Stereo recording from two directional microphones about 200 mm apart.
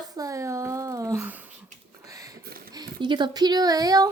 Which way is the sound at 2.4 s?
50° right (ahead or behind).